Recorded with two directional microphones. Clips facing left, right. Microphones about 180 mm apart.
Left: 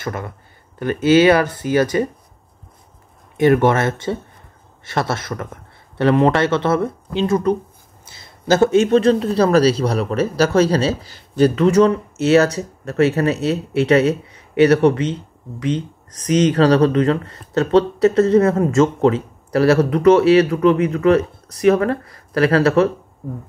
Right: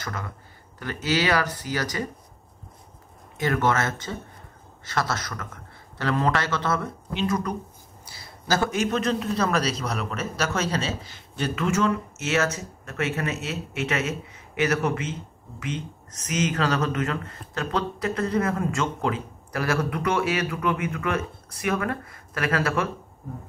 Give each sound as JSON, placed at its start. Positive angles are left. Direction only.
{"t": 0.0, "sound": "speech", "side_deg": 25}
{"t": 3.3, "sound": "speech", "side_deg": 25}